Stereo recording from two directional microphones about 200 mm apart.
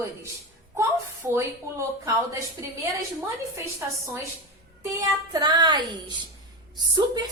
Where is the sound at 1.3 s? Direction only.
15° right (ahead or behind).